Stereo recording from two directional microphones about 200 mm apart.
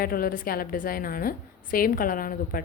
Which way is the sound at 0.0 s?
45° left (ahead or behind).